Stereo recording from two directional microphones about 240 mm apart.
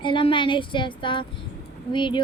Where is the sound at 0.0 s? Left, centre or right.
Left.